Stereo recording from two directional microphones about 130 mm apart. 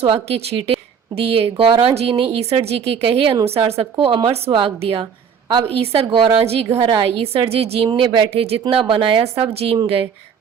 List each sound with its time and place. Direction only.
0.0 s speech: 50° right (ahead or behind)